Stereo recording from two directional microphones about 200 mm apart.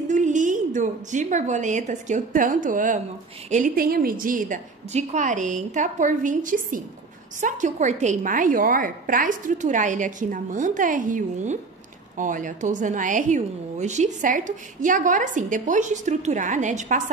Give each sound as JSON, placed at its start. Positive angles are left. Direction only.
{"t": 0.1, "sound": "a woman's voice", "side_deg": -40}